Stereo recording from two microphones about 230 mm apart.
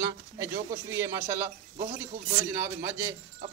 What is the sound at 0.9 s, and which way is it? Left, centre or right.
Speech, centre.